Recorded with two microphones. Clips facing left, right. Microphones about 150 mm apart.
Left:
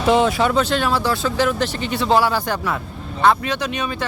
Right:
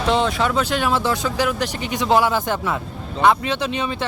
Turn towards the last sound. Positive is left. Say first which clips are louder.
# even
turn(degrees=-15)  # may be behind; listen again after turning